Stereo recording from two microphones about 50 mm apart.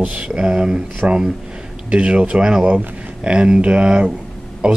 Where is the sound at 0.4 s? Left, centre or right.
Centre.